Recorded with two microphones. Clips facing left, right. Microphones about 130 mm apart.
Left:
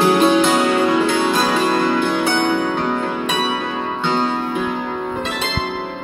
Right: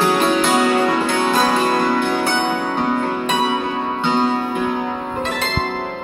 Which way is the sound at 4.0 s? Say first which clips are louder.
Right 2 dB; 10° right (ahead or behind).